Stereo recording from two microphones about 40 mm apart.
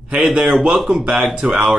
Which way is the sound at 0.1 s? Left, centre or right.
Right.